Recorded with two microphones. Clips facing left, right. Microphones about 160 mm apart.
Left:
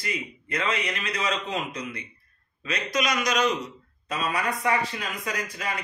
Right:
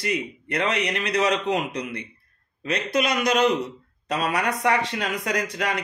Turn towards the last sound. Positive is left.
turn(degrees=-75)  # may be behind; listen again after turning